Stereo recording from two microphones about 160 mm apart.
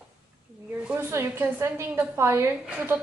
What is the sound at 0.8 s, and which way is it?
A woman's voice, 15° right (ahead or behind).